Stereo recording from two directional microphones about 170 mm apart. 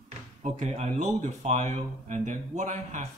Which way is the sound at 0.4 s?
45° right (ahead or behind).